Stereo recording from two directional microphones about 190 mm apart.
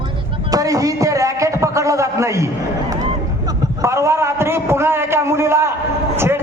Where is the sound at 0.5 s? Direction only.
20° right (ahead or behind).